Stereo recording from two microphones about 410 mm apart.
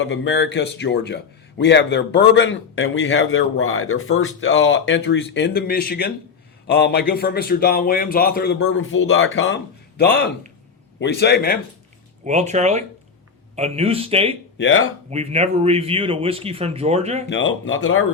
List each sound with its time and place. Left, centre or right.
0.0 s speech: left
12.2 s speech: centre
14.6 s speech: left
15.1 s speech: centre
17.2 s speech: left